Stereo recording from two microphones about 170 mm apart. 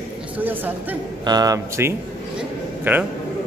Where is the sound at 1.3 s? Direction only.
20° right (ahead or behind).